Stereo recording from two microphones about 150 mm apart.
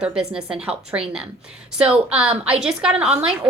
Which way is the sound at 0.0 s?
5° right (ahead or behind).